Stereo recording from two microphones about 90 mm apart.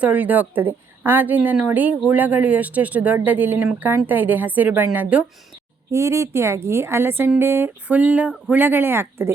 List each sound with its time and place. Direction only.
0.0 s a woman's voice: 15° right (ahead or behind)
5.9 s a woman's voice: 35° right (ahead or behind)